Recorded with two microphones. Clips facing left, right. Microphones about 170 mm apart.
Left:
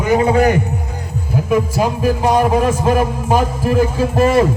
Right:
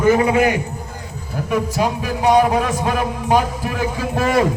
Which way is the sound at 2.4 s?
45° left (ahead or behind).